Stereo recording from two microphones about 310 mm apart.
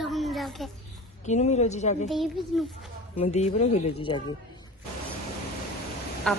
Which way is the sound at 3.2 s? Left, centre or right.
Left.